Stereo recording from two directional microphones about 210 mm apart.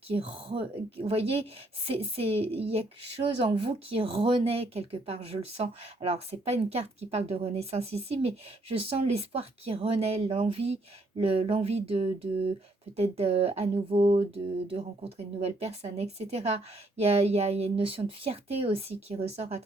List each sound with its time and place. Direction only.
0.1 s speech: 25° right (ahead or behind)